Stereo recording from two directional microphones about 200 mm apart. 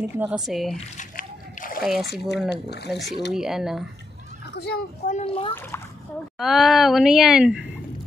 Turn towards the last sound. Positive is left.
turn(degrees=-5)  # may be behind; listen again after turning